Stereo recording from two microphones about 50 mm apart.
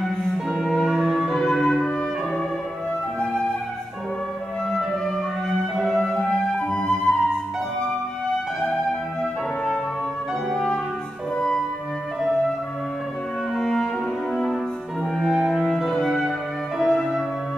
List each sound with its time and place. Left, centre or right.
0.5 s music: centre
0.7 s music: centre
4.6 s music: centre
5.9 s flute: centre
11.3 s music: centre
13.6 s music: centre
16.7 s music: centre